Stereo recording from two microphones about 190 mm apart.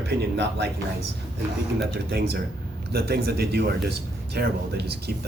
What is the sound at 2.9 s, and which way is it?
Speech, 55° right (ahead or behind).